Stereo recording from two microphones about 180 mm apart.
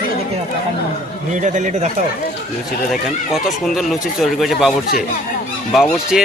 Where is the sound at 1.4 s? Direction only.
40° right (ahead or behind).